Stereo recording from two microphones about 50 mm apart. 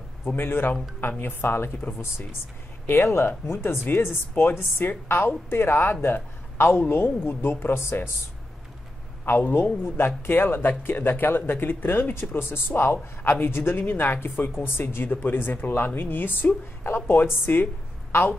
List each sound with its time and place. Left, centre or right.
0.4 s speech: left
2.9 s speech: left
9.3 s speech: left